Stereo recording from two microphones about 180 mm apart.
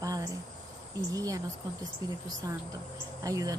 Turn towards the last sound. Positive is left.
turn(degrees=-20)  # may be behind; listen again after turning